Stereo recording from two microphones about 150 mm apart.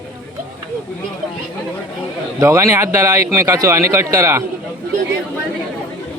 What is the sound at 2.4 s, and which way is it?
Speech, 20° right (ahead or behind).